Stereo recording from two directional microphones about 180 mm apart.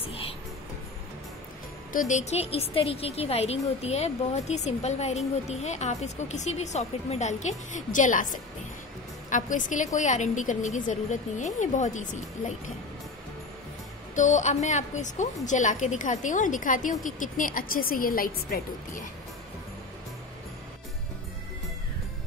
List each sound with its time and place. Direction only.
1.9 s a woman's voice: 45° left (ahead or behind)
14.1 s a woman's voice: 40° left (ahead or behind)